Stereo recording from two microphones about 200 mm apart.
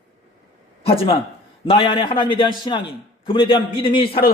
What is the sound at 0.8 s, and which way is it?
A man's voice, 30° left (ahead or behind).